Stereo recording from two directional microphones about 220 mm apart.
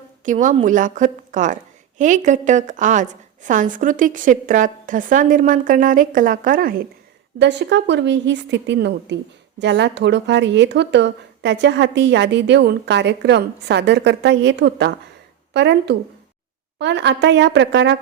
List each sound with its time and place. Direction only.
0.3 s a woman's voice: 35° right (ahead or behind)
7.3 s a woman's voice: 50° right (ahead or behind)